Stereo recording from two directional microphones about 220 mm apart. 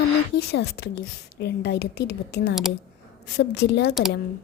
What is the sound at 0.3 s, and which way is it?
A woman's voice, 45° left (ahead or behind).